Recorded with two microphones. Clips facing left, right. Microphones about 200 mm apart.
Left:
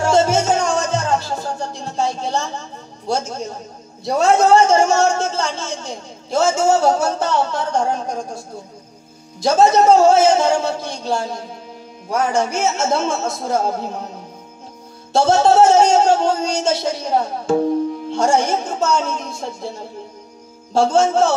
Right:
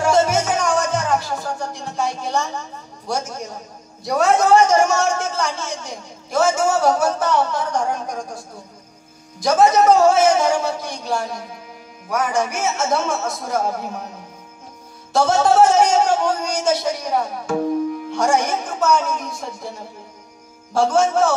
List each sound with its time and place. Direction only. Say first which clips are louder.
0.0 s music: left 1 dB; 25° left (ahead or behind)
3.1 s a man's voice: left 3 dB; 25° left (ahead or behind)
15.1 s a man's voice: left 2 dB; 25° left (ahead or behind)